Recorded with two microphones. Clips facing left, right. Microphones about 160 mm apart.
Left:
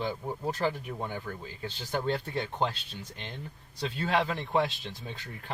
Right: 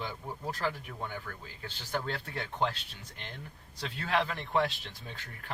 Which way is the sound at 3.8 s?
25° left (ahead or behind).